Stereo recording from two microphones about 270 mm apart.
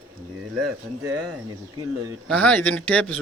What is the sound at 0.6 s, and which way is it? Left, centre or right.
Speech, right.